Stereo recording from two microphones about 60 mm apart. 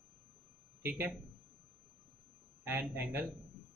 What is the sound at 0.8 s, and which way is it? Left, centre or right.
Speech, right.